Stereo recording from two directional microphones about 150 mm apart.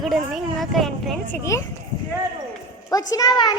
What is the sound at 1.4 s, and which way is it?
Speech, 20° left (ahead or behind).